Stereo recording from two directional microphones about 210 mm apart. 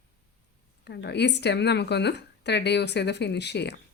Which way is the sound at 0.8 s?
55° left (ahead or behind).